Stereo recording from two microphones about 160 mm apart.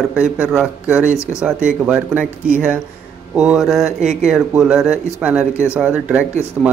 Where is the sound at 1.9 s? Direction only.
10° right (ahead or behind).